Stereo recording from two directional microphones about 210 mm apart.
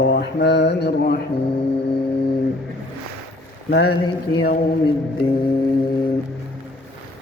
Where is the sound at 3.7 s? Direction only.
50° left (ahead or behind).